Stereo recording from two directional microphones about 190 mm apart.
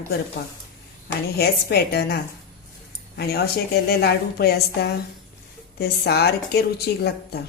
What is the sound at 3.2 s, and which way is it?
A woman's voice, 55° left (ahead or behind).